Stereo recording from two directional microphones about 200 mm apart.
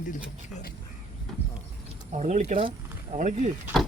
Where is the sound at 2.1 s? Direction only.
35° right (ahead or behind).